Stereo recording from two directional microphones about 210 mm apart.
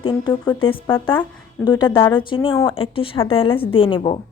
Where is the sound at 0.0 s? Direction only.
20° left (ahead or behind).